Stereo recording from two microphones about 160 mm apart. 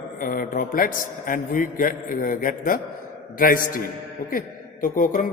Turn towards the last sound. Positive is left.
turn(degrees=55)  # may be behind; listen again after turning